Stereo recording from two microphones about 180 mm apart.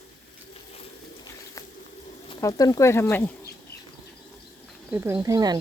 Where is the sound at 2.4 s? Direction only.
20° left (ahead or behind).